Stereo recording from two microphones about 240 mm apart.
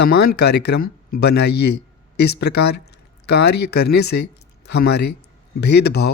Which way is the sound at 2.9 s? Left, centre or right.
Left.